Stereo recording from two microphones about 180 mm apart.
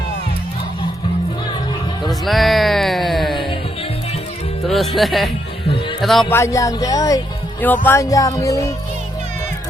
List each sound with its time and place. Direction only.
2.0 s music: centre (ahead or behind)
4.6 s music: centre (ahead or behind)
4.9 s speech: centre (ahead or behind)
6.0 s music: centre (ahead or behind)
6.3 s speech: 15° left (ahead or behind)
7.9 s music: 20° left (ahead or behind)